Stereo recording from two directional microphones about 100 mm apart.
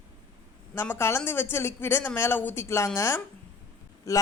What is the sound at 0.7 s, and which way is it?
A woman's voice, 25° left (ahead or behind).